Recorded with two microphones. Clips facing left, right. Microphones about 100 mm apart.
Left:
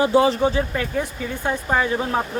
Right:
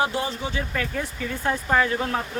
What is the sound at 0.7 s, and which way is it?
Speech, 20° left (ahead or behind).